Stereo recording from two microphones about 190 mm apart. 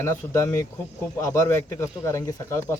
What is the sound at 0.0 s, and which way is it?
Speech, 15° left (ahead or behind).